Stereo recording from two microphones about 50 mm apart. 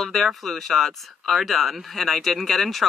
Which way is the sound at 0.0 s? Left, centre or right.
Centre.